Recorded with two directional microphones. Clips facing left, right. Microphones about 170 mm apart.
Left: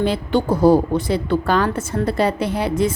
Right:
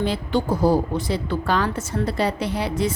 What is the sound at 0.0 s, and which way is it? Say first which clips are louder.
A woman's voice: left 4 dB; 60° left (ahead or behind).